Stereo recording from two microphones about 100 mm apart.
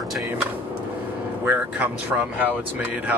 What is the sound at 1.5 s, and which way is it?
Speech, 15° right (ahead or behind).